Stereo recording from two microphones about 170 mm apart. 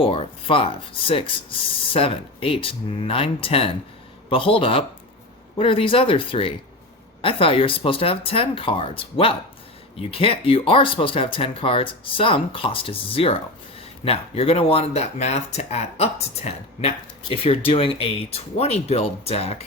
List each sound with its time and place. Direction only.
0.0 s speech: 30° left (ahead or behind)